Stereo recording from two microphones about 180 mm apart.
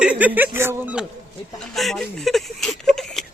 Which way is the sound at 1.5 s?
Centre (ahead or behind).